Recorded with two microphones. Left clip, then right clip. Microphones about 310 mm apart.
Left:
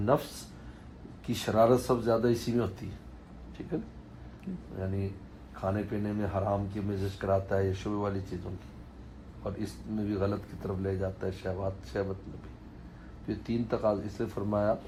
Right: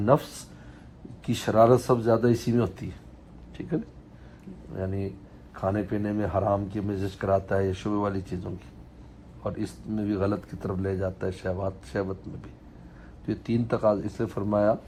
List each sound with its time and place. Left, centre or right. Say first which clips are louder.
0.0 s speech: right 5 dB; right
5.5 s speech: right 5 dB; right
13.2 s speech: right 5 dB; right